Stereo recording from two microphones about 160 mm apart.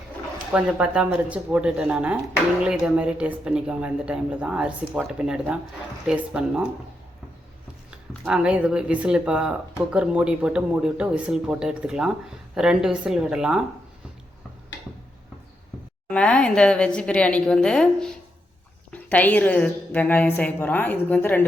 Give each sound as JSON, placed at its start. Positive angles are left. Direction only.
{"t": 0.5, "sound": "speech", "side_deg": -10}
{"t": 7.9, "sound": "speech", "side_deg": -5}
{"t": 16.0, "sound": "a woman's voice", "side_deg": 5}